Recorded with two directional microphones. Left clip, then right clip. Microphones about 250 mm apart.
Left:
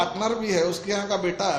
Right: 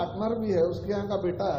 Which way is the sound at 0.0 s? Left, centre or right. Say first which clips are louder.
Left 5 dB; left.